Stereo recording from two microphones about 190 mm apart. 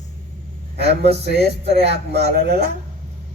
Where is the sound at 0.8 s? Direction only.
60° right (ahead or behind).